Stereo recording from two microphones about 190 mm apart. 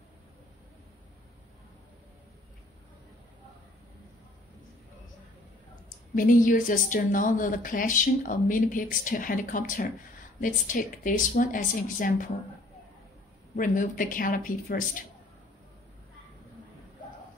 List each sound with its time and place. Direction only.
6.1 s speech: 45° left (ahead or behind)
13.6 s speech: 45° left (ahead or behind)